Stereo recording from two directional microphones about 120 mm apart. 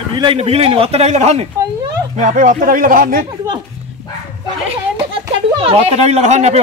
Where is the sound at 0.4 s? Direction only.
55° right (ahead or behind).